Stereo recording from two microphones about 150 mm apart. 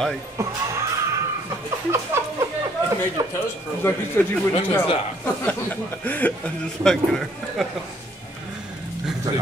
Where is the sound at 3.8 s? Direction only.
15° left (ahead or behind).